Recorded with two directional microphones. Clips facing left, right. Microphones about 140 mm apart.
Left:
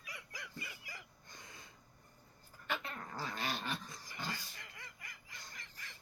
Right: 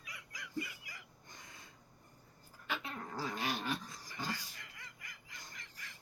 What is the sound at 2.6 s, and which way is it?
Dog, 5° right (ahead or behind).